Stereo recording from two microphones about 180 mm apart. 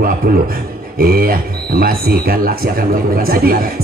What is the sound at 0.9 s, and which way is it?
Speech, 55° right (ahead or behind).